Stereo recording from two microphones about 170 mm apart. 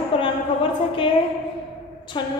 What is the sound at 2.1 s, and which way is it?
Speech, 25° left (ahead or behind).